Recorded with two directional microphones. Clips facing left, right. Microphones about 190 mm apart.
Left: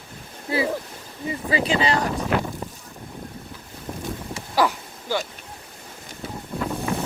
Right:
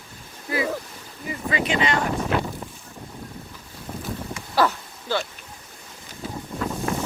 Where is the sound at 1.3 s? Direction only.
30° left (ahead or behind).